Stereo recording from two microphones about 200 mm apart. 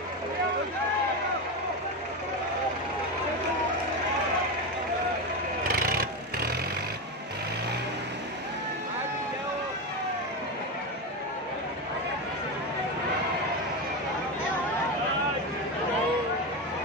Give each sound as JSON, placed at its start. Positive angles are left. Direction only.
{"t": 5.7, "sound": "vehicle", "side_deg": -45}